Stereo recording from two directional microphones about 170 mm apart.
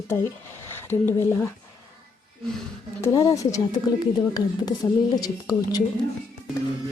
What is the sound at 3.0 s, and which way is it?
A woman's voice, 20° left (ahead or behind).